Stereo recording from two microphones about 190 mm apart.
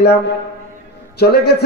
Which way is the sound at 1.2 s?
60° left (ahead or behind).